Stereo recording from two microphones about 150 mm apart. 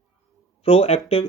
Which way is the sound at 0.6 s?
40° left (ahead or behind).